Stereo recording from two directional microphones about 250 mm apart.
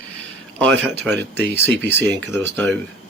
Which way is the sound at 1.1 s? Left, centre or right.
Right.